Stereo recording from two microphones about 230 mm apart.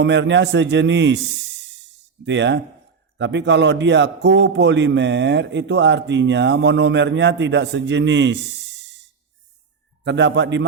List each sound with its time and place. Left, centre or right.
0.0 s a man's voice: right
10.0 s a man's voice: right